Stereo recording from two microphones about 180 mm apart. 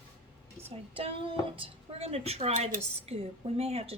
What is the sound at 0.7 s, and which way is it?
A woman's voice, 30° right (ahead or behind).